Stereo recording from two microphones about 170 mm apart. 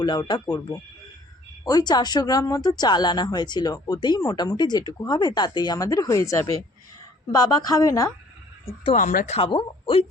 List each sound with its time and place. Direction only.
0.0 s speech: 25° left (ahead or behind)
1.6 s speech: 25° left (ahead or behind)
9.0 s speech: 50° left (ahead or behind)